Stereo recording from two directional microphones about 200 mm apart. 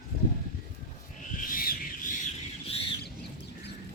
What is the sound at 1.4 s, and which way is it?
Bird, 45° left (ahead or behind).